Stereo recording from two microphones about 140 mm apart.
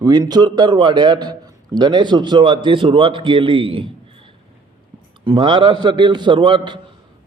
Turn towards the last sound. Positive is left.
turn(degrees=-35)  # may be behind; listen again after turning